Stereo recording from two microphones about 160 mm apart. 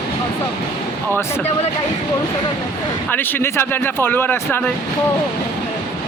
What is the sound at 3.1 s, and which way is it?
Speech, 10° left (ahead or behind).